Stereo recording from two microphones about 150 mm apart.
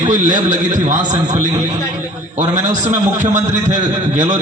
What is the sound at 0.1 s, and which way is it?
A man's voice, 55° right (ahead or behind).